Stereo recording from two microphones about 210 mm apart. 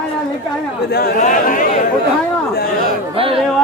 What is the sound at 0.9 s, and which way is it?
Speech, 45° left (ahead or behind).